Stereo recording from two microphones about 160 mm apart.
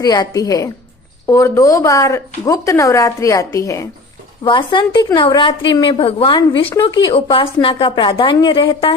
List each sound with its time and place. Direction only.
0.0 s speech: 25° left (ahead or behind)
4.4 s a woman's voice: 30° left (ahead or behind)